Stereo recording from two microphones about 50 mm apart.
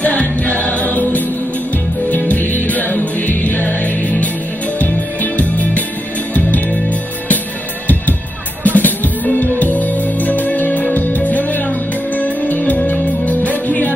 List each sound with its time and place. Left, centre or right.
0.0 s music: left
8.6 s music: left